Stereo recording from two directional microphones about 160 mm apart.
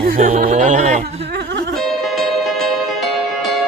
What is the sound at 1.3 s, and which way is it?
Music, 90° right.